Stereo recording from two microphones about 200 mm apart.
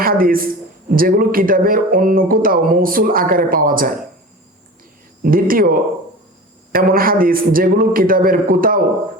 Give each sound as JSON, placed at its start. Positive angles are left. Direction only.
{"t": 0.0, "sound": "speech", "side_deg": -45}
{"t": 5.2, "sound": "speech", "side_deg": -45}
{"t": 6.7, "sound": "speech", "side_deg": -45}